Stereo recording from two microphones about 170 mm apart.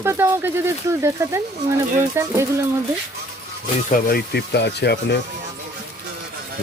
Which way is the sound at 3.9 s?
65° left (ahead or behind).